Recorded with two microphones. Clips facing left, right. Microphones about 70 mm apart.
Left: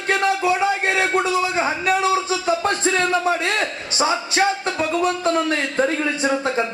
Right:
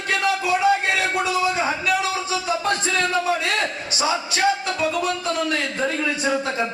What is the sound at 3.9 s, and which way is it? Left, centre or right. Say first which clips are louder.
Music: left 4 dB; left.